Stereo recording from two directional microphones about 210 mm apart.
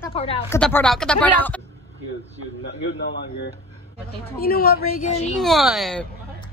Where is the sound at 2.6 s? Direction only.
55° left (ahead or behind).